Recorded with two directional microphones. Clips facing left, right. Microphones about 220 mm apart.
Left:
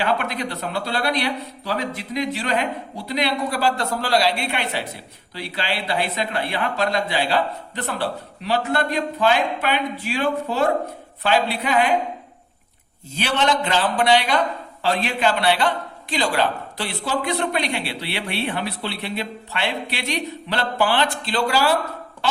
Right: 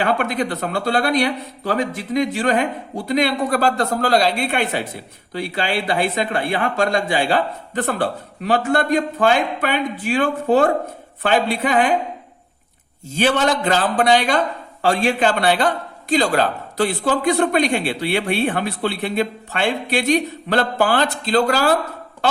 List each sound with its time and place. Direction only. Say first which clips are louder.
0.0 s a man's voice: right 4 dB; 50° right (ahead or behind)
13.1 s a man's voice: right 4 dB; 45° right (ahead or behind)